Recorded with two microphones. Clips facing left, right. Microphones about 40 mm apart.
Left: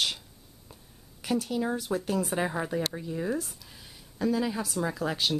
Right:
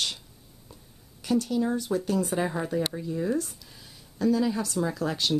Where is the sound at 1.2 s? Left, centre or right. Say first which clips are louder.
Right 3 dB; centre.